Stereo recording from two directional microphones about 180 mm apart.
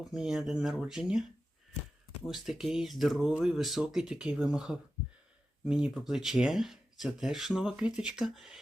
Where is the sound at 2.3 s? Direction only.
Centre (ahead or behind).